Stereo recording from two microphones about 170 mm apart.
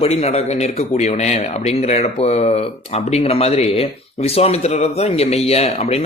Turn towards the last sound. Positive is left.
turn(degrees=40)  # may be behind; listen again after turning